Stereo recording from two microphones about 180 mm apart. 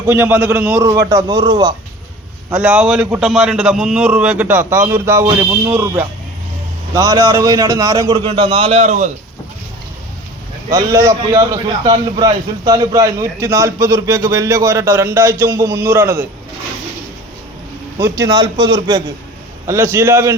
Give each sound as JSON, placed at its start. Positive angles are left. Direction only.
{"t": 0.1, "sound": "a man's voice", "side_deg": -10}
{"t": 2.5, "sound": "a man's voice", "side_deg": -5}
{"t": 8.3, "sound": "a man's voice", "side_deg": -30}
{"t": 10.7, "sound": "a man's voice", "side_deg": -20}
{"t": 18.0, "sound": "a man's voice", "side_deg": -20}